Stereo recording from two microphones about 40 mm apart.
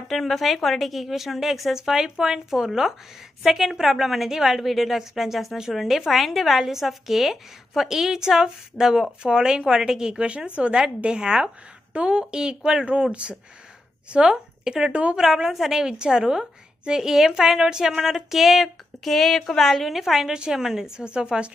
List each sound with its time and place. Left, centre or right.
0.1 s a woman's voice: centre
19.9 s speech: centre
20.2 s a woman's voice: centre
21.0 s a woman's voice: right